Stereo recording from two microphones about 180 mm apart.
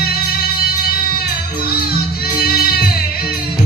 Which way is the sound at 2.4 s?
55° left (ahead or behind).